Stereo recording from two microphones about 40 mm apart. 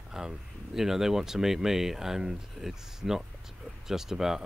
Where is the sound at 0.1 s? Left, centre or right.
Centre.